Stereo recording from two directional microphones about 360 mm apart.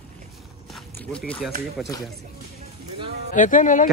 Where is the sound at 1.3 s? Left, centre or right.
Centre.